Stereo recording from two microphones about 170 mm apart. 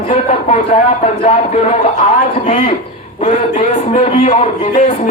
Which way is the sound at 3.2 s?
45° left (ahead or behind).